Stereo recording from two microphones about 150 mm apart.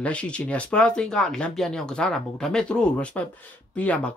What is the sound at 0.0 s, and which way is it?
Speech, 10° left (ahead or behind).